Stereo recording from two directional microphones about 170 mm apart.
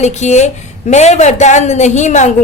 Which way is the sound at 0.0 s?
40° left (ahead or behind).